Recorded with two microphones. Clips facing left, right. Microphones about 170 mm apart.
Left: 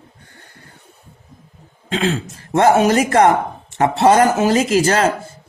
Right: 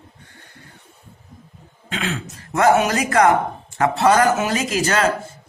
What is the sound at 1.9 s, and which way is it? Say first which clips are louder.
Speech: left 7 dB; 30° left (ahead or behind).